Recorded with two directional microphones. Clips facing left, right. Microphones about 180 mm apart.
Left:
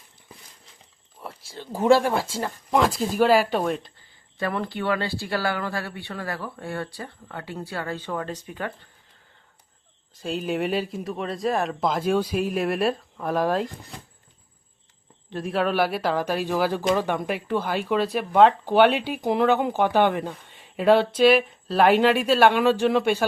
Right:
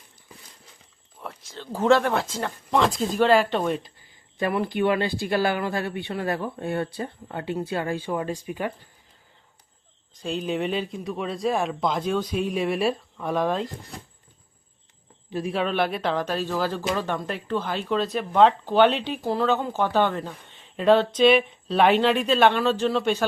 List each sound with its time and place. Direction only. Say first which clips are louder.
1.2 s speech: even; 5° left (ahead or behind)
4.4 s speech: right 4 dB; 15° right (ahead or behind)
10.2 s speech: left 1 dB; 5° left (ahead or behind)
15.3 s speech: left 1 dB; centre (ahead or behind)